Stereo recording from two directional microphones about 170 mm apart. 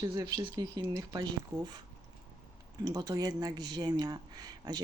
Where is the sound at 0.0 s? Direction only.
25° right (ahead or behind).